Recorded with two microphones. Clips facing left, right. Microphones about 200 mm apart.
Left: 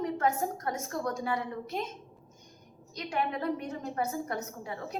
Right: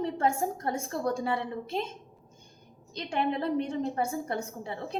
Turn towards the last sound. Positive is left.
turn(degrees=-30)  # may be behind; listen again after turning